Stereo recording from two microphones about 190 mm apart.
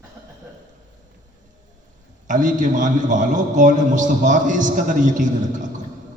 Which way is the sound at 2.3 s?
40° right (ahead or behind).